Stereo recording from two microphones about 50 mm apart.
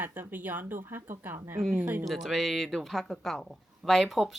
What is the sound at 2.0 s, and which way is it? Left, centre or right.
Speech, centre.